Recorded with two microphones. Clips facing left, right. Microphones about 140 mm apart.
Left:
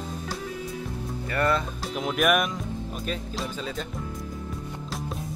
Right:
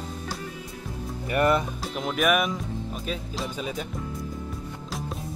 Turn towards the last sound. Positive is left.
turn(degrees=0)  # may be behind; listen again after turning